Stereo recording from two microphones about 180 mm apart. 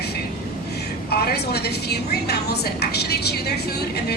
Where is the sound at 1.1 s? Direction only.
60° left (ahead or behind).